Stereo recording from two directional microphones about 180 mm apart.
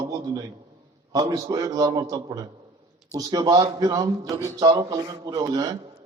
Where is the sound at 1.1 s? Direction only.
20° right (ahead or behind).